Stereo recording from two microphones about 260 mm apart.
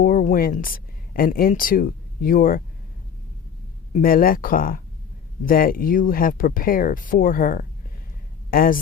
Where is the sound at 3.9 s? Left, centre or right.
Left.